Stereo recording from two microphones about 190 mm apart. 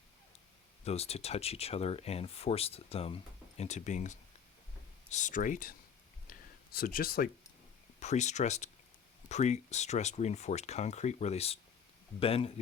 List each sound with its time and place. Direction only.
0.9 s speech: 35° left (ahead or behind)
6.7 s speech: 50° left (ahead or behind)
7.9 s speech: 35° left (ahead or behind)